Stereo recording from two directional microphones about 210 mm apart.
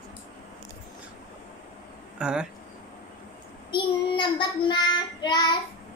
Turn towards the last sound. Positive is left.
turn(degrees=20)  # may be behind; listen again after turning